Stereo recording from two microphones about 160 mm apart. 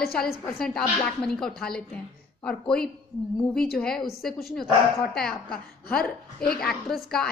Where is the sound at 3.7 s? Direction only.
5° left (ahead or behind).